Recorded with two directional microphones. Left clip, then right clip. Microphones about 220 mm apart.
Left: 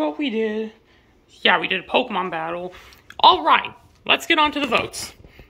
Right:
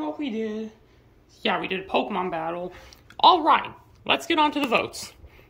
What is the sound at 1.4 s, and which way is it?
Speech, 5° right (ahead or behind).